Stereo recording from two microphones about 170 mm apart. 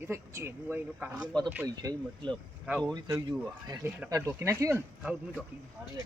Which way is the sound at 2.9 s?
20° right (ahead or behind).